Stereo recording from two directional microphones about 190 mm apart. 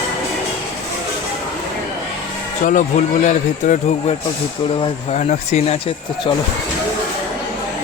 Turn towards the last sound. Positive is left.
turn(degrees=30)  # may be behind; listen again after turning